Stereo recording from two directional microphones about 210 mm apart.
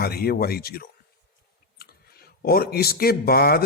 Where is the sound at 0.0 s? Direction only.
45° left (ahead or behind).